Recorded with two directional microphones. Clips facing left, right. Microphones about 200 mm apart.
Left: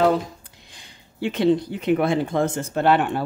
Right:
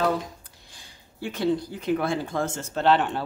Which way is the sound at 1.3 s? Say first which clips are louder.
Left 5 dB; 20° left (ahead or behind).